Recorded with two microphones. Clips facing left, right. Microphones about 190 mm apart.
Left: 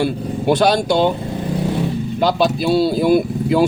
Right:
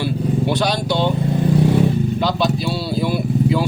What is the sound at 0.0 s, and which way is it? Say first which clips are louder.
Vehicle: left 1 dB; 50° left (ahead or behind).